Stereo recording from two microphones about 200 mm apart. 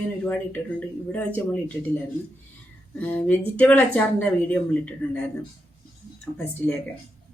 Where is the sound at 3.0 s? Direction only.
10° left (ahead or behind).